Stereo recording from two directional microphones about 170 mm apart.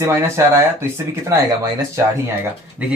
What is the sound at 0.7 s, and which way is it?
Speech, 20° right (ahead or behind).